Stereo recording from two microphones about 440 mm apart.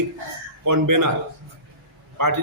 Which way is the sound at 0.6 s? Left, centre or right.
Right.